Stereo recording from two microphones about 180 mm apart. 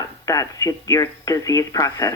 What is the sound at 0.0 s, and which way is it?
Speech, 20° left (ahead or behind).